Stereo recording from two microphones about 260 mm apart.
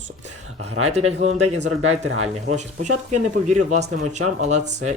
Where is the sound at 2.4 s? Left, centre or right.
Right.